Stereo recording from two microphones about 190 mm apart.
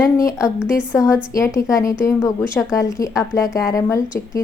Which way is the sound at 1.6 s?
15° left (ahead or behind).